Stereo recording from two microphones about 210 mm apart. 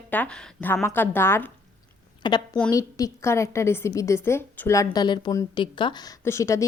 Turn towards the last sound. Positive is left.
turn(degrees=15)  # may be behind; listen again after turning